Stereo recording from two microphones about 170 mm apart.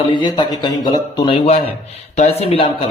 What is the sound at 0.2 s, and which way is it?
Speech, 25° left (ahead or behind).